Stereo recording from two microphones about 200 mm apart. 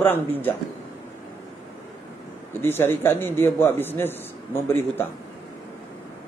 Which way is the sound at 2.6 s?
10° left (ahead or behind).